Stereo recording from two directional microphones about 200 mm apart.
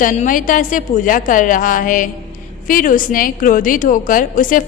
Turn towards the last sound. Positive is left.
turn(degrees=40)  # may be behind; listen again after turning